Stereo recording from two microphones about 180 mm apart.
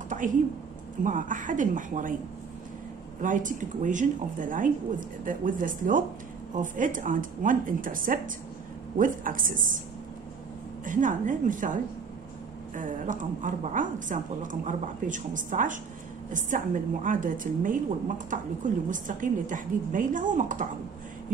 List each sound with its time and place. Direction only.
0.1 s a sound: 45° right (ahead or behind)
1.0 s a woman's voice: 45° right (ahead or behind)
3.2 s a woman's voice: 45° right (ahead or behind)
10.9 s a woman's voice: 45° right (ahead or behind)